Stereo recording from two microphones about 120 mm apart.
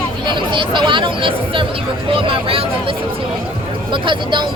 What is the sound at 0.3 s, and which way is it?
Speech, 45° right (ahead or behind).